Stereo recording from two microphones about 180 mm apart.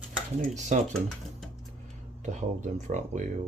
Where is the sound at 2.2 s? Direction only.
40° right (ahead or behind).